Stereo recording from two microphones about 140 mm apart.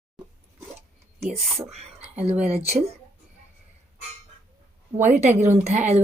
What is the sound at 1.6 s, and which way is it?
Whispering, 50° right (ahead or behind).